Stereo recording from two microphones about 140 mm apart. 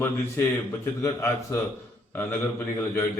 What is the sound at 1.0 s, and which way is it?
Speech, 20° left (ahead or behind).